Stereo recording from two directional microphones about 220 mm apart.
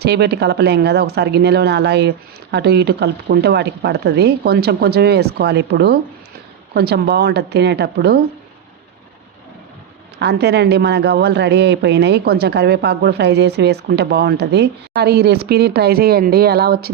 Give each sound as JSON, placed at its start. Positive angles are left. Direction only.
{"t": 0.0, "sound": "a woman's voice", "side_deg": -50}
{"t": 10.2, "sound": "a woman's voice", "side_deg": -50}